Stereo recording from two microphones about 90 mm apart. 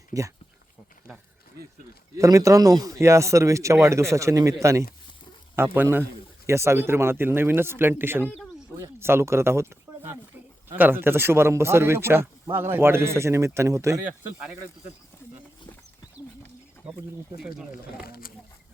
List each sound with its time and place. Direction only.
0.1 s speech: 40° right (ahead or behind)
2.1 s speech: 35° right (ahead or behind)
9.0 s a sound: 30° right (ahead or behind)
10.8 s speech: 20° right (ahead or behind)